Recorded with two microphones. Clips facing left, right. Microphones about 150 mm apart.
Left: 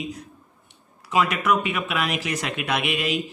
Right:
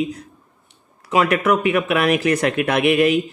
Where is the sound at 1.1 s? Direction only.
55° right (ahead or behind).